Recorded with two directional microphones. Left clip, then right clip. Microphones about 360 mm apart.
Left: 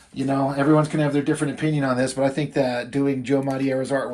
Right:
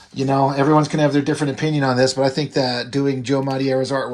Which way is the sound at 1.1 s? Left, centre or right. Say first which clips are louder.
Right 3 dB; centre.